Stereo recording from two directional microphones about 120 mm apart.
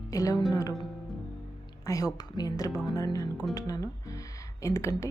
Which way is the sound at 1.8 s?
30° left (ahead or behind).